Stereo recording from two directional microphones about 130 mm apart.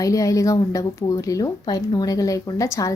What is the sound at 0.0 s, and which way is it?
Speech, 25° left (ahead or behind).